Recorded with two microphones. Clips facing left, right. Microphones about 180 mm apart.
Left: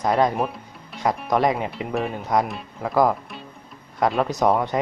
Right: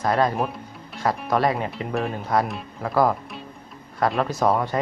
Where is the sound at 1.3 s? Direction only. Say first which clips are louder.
Left 1 dB; 15° left (ahead or behind).